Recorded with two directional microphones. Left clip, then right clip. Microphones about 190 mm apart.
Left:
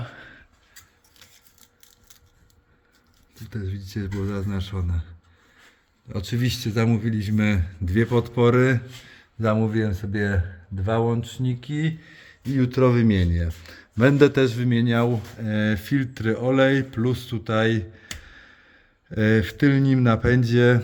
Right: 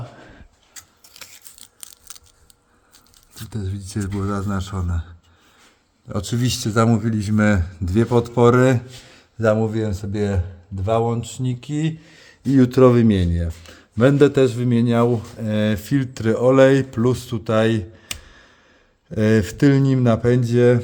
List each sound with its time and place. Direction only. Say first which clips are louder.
0.2 s a sound: even; 25° right (ahead or behind)
1.2 s scissors: right 10 dB; 90° right
3.9 s a man's voice: right 5 dB; 25° right (ahead or behind)
6.1 s speech: right 4 dB; 35° right (ahead or behind)
6.8 s a man's voice: right 5 dB; 25° right (ahead or behind)
9.4 s a man's voice: right 6 dB; 10° right (ahead or behind)
9.6 s speech: right 2 dB; centre (ahead or behind)
12.5 s speech: right 8 dB; 30° right (ahead or behind)
12.8 s a man's voice: right 4 dB; 15° right (ahead or behind); by 20.7 s 5° left (ahead or behind)